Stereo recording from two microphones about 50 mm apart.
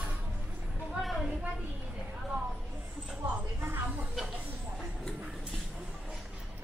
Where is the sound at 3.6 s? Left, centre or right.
Right.